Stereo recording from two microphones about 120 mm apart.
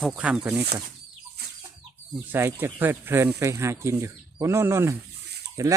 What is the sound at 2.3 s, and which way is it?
Speech, 15° right (ahead or behind).